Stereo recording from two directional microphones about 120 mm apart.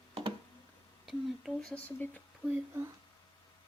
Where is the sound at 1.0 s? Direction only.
5° left (ahead or behind).